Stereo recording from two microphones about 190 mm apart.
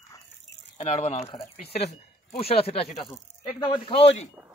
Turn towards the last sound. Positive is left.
turn(degrees=30)  # may be behind; listen again after turning